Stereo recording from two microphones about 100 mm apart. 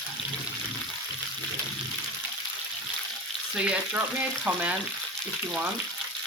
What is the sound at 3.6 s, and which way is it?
Frying, 10° right (ahead or behind).